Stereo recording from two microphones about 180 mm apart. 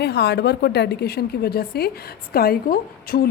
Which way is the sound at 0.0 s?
65° left (ahead or behind).